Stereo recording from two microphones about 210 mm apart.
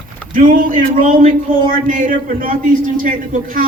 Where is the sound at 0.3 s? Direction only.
40° right (ahead or behind).